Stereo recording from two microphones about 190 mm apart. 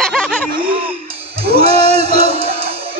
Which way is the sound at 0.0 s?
5° left (ahead or behind).